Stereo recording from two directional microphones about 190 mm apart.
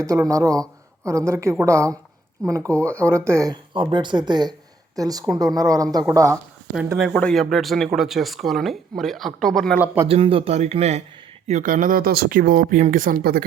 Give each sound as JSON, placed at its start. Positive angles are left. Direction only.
{"t": 0.0, "sound": "a woman's voice", "side_deg": -15}
{"t": 2.7, "sound": "speech", "side_deg": 5}
{"t": 3.0, "sound": "a woman's voice", "side_deg": -15}
{"t": 6.9, "sound": "speech", "side_deg": 0}
{"t": 9.7, "sound": "a woman's voice", "side_deg": -10}
{"t": 10.1, "sound": "speech", "side_deg": -30}